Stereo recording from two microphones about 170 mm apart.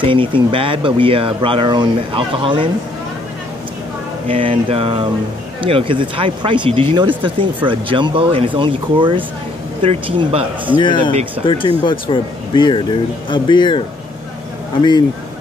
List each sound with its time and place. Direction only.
0.0 s speech: 30° right (ahead or behind)
4.3 s speech: 30° right (ahead or behind)
10.8 s speech: 30° left (ahead or behind)